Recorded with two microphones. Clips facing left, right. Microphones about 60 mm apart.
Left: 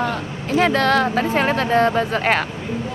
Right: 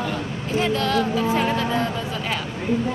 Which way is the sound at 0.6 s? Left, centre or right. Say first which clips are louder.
Left 5 dB; left.